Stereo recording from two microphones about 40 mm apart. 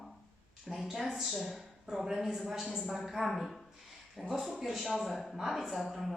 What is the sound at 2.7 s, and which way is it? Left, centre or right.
Speech, centre.